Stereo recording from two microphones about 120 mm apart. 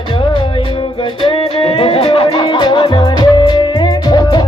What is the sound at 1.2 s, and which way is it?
Music, 45° left (ahead or behind).